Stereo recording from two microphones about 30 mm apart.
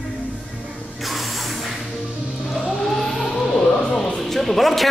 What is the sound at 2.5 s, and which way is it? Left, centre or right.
Vehicle, centre.